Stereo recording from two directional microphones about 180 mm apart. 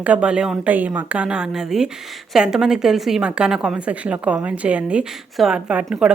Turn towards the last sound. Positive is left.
turn(degrees=-5)  # may be behind; listen again after turning